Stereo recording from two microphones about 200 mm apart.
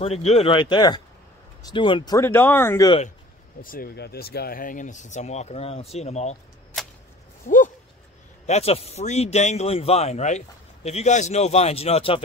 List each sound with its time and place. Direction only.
0.0 s speech: 30° left (ahead or behind); by 2.9 s 10° left (ahead or behind)
3.6 s speech: 45° left (ahead or behind)
7.4 s a sound: 40° left (ahead or behind)
8.5 s speech: 30° left (ahead or behind)